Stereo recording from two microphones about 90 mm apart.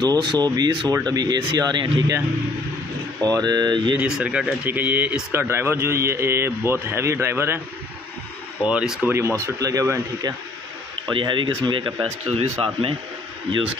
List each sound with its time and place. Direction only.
0.0 s speech: 55° right (ahead or behind)
3.3 s speech: 45° right (ahead or behind)
4.2 s a man's voice: 10° right (ahead or behind); by 7.6 s 25° right (ahead or behind)
8.6 s speech: 10° right (ahead or behind)
9.6 s a man's voice: 40° right (ahead or behind)
11.1 s speech: 65° right (ahead or behind); by 12.9 s 85° right